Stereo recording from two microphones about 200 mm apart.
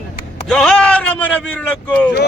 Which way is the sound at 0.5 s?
5° left (ahead or behind).